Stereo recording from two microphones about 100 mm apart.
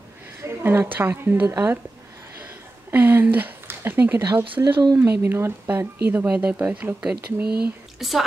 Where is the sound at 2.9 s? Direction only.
20° right (ahead or behind).